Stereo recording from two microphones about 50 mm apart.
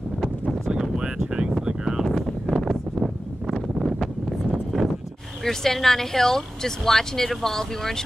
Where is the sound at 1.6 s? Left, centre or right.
Centre.